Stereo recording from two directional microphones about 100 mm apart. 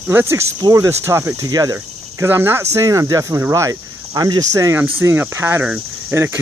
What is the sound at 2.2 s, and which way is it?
Speech, 25° right (ahead or behind).